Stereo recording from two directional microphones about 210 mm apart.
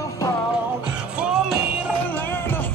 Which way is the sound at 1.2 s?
5° right (ahead or behind).